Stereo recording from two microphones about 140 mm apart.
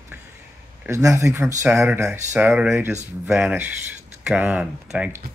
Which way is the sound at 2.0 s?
10° right (ahead or behind).